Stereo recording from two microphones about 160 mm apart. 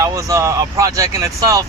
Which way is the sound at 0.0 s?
20° right (ahead or behind).